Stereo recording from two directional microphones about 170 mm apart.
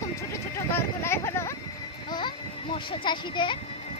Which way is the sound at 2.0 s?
25° left (ahead or behind).